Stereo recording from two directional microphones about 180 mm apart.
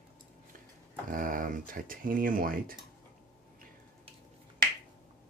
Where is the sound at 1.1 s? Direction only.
50° right (ahead or behind).